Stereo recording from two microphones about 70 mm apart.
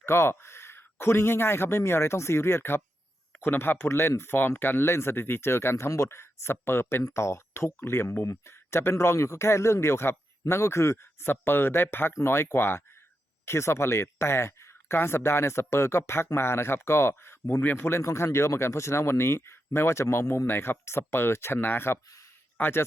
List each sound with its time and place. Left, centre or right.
0.0 s a man's voice: left